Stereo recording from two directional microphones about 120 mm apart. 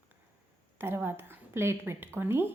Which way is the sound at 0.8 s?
20° right (ahead or behind).